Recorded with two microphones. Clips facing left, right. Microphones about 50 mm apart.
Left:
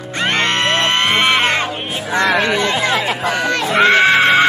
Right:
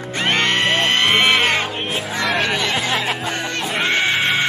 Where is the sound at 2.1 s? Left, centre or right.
Left.